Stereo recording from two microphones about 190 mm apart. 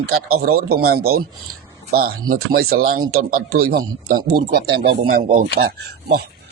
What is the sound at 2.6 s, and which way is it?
Speech, 90° right.